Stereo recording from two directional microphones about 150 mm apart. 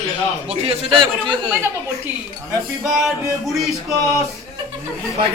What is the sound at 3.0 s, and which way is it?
Speech, centre (ahead or behind).